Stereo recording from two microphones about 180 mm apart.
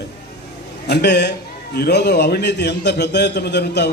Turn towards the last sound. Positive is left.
turn(degrees=65)  # may be behind; listen again after turning